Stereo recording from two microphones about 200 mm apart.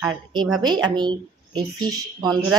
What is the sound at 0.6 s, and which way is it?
A woman's voice, 20° right (ahead or behind).